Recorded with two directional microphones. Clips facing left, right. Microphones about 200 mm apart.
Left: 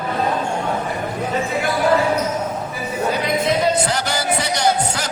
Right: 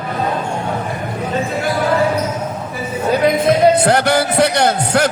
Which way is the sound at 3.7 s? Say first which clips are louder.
Right 7 dB; 60° right (ahead or behind).